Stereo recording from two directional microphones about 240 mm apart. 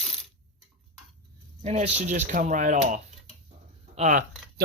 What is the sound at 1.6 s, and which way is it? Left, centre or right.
Speech, right.